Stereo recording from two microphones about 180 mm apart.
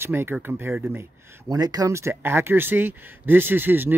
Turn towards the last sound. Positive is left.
turn(degrees=-10)  # may be behind; listen again after turning